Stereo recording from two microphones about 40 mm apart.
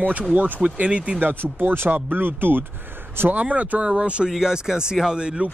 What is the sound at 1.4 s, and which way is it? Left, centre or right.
Speech, right.